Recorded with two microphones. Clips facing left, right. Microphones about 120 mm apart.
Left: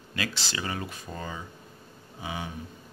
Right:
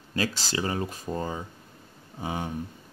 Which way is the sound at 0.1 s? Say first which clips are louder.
Right 5 dB; 40° right (ahead or behind).